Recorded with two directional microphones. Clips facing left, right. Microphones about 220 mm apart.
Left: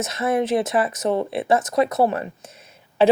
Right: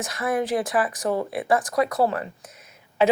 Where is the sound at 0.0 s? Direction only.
25° left (ahead or behind).